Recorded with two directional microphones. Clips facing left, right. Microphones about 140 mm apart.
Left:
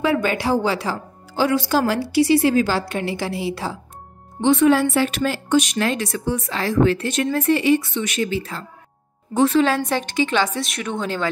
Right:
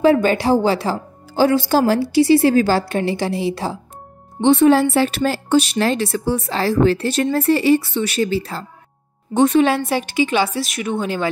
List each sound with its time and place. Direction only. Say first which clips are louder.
0.1 s speech: right 5 dB; 30° right (ahead or behind)
2.4 s a woman's voice: right 3 dB; 40° right (ahead or behind)
9.3 s a woman's voice: right 3 dB; 20° right (ahead or behind)